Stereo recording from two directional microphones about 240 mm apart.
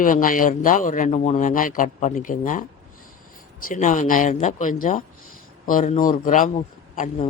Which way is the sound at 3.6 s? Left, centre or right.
Left.